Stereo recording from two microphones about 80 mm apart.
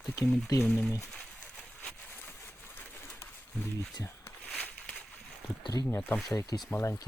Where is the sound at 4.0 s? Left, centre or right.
Left.